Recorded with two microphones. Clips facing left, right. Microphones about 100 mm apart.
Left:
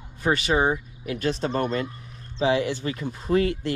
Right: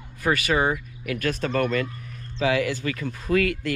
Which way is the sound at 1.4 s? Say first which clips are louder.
Right 1 dB; 25° left (ahead or behind).